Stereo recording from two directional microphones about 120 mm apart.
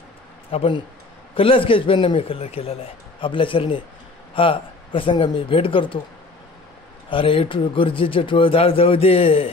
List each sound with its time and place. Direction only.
0.5 s a man's voice: 55° left (ahead or behind)
7.1 s a man's voice: 50° left (ahead or behind)